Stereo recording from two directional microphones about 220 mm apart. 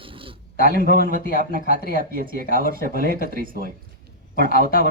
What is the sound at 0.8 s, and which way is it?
Speech, 40° right (ahead or behind).